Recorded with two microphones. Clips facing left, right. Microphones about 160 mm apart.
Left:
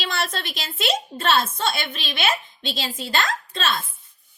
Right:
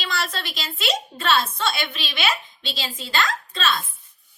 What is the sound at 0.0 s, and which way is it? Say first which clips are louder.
A woman's voice: left 1 dB; 50° left (ahead or behind).